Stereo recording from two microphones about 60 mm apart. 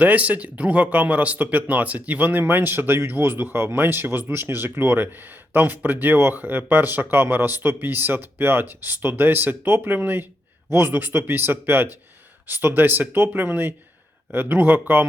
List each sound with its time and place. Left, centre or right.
0.0 s speech: right